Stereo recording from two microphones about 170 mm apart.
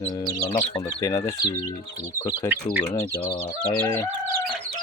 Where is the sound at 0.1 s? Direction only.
25° left (ahead or behind).